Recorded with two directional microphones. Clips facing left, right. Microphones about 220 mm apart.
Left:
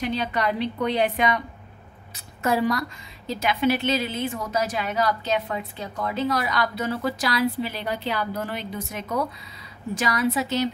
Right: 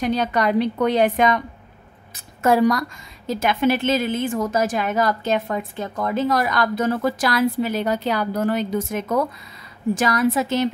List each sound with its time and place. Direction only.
0.1 s a woman's voice: 45° right (ahead or behind)